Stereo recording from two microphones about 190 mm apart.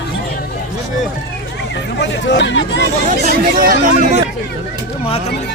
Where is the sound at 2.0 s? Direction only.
70° left (ahead or behind).